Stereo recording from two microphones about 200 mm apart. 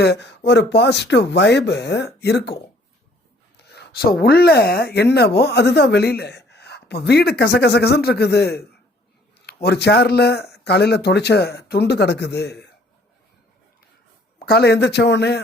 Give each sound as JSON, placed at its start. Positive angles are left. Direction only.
{"t": 0.0, "sound": "speech", "side_deg": 60}
{"t": 3.8, "sound": "speech", "side_deg": 50}
{"t": 14.3, "sound": "speech", "side_deg": 50}